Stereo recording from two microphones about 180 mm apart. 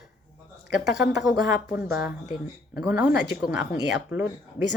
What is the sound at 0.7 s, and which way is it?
Speech, 5° right (ahead or behind).